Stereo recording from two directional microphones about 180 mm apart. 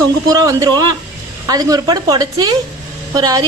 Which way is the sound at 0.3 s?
20° right (ahead or behind).